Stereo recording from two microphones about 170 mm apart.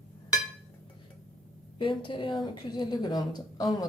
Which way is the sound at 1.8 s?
30° left (ahead or behind).